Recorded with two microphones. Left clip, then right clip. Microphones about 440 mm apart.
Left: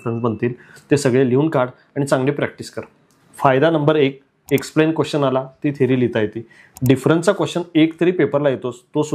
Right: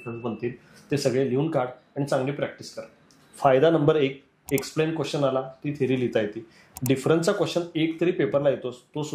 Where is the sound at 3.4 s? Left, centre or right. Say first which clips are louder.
Left 4 dB; left.